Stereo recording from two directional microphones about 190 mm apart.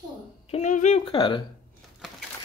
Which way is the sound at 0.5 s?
40° left (ahead or behind).